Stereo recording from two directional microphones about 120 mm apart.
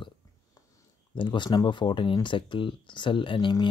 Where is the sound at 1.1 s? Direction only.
40° left (ahead or behind).